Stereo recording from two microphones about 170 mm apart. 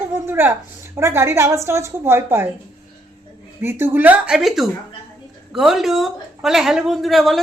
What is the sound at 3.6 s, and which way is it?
A man's voice, 15° right (ahead or behind).